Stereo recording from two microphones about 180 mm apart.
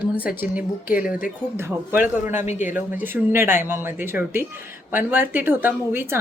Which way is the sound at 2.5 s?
45° left (ahead or behind).